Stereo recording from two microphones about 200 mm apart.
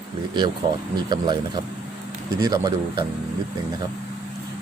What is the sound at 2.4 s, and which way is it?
Speech, 20° right (ahead or behind).